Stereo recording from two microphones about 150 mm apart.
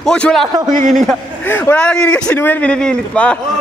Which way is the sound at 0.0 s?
5° left (ahead or behind).